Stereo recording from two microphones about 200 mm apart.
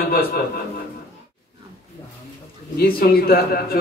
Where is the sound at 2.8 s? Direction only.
50° left (ahead or behind).